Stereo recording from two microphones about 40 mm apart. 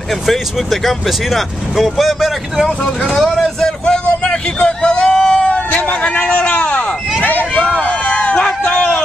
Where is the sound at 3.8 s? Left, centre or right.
Left.